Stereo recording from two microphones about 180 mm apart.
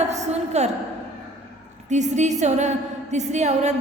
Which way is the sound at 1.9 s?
40° right (ahead or behind).